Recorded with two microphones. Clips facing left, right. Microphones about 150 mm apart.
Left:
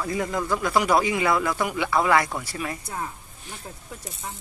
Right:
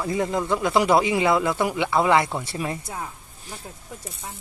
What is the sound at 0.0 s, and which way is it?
Speech, 25° right (ahead or behind).